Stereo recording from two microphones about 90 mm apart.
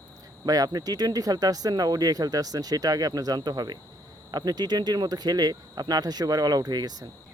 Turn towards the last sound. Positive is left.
turn(degrees=-50)  # may be behind; listen again after turning